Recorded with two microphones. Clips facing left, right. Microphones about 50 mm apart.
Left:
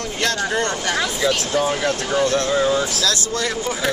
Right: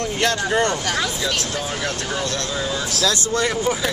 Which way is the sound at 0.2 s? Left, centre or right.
Centre.